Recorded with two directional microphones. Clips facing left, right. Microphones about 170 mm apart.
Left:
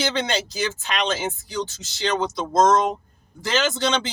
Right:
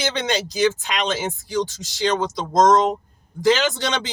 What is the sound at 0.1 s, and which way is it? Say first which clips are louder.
Speech: right 1 dB; 15° right (ahead or behind).